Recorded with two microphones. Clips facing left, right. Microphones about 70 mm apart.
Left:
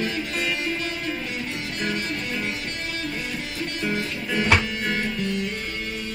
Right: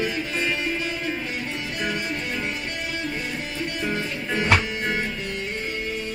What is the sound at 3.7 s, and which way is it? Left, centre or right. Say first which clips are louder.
Music: left 1 dB; right.